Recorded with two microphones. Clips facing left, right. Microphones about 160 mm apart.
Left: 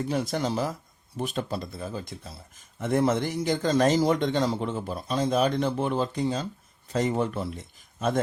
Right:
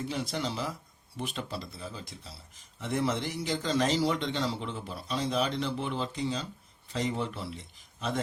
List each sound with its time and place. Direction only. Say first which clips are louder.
0.1 s speech: left 6 dB; 45° left (ahead or behind)